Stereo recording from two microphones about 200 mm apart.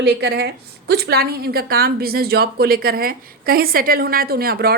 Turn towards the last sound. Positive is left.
turn(degrees=-50)  # may be behind; listen again after turning